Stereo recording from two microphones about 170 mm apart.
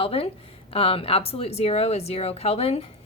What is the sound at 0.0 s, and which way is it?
Speech, 35° left (ahead or behind).